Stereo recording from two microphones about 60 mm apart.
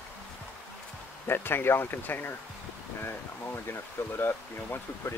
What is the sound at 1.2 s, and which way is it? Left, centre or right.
Speech, left.